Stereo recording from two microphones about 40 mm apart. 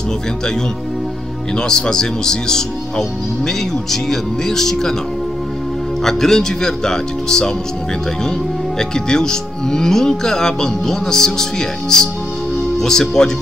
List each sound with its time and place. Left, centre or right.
1.6 s speech: centre
6.0 s speech: centre
8.7 s speech: centre